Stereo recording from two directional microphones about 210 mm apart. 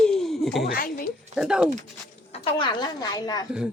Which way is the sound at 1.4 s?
Centre (ahead or behind).